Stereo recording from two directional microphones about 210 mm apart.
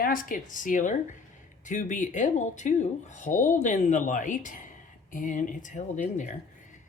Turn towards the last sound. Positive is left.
turn(degrees=35)  # may be behind; listen again after turning